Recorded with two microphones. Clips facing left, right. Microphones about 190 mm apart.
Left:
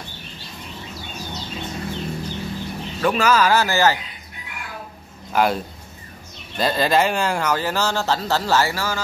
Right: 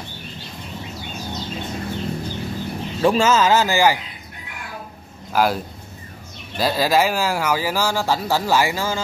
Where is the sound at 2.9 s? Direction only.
25° right (ahead or behind).